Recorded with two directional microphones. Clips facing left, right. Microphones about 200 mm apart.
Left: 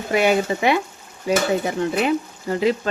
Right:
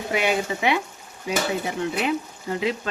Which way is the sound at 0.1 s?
45° left (ahead or behind).